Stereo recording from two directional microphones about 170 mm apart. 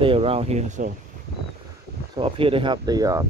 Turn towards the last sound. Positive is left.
turn(degrees=-20)  # may be behind; listen again after turning